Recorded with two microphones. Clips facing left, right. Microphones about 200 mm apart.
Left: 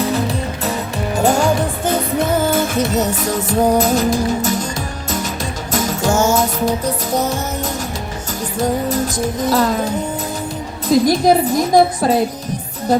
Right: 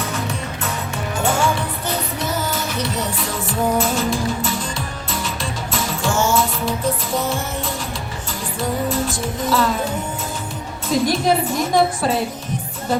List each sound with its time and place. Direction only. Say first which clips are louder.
0.0 s music: left 7 dB; 35° left (ahead or behind)
12.9 s speech: left 5 dB; 40° left (ahead or behind)